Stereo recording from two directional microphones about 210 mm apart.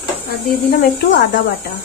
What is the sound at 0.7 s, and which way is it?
Speech, 55° left (ahead or behind).